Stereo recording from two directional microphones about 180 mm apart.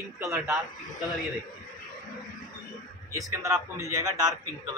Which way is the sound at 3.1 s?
15° right (ahead or behind).